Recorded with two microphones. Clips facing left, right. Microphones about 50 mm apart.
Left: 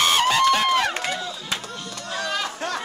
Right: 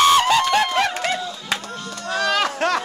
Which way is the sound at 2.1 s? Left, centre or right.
Right.